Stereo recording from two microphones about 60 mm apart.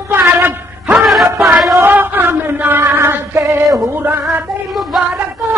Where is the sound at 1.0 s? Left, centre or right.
Centre.